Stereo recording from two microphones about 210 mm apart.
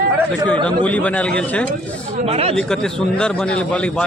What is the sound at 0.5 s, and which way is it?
Speech, 25° right (ahead or behind).